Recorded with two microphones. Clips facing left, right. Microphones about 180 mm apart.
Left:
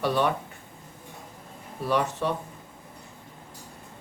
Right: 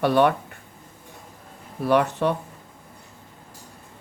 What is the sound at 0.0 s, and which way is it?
Speech, 60° right (ahead or behind).